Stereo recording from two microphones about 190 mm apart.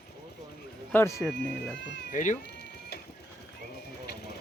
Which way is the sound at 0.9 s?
15° left (ahead or behind).